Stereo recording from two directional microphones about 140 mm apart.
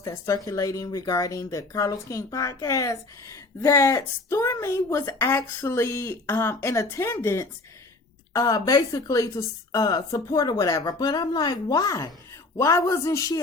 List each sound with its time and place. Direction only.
0.0 s a woman's voice: 20° left (ahead or behind)